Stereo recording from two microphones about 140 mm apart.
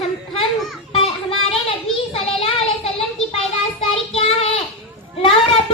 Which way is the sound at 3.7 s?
40° left (ahead or behind).